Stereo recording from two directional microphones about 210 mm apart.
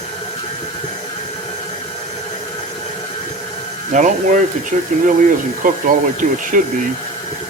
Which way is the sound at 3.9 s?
35° right (ahead or behind).